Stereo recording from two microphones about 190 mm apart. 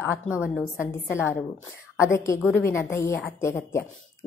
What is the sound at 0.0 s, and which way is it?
Speech, 10° left (ahead or behind).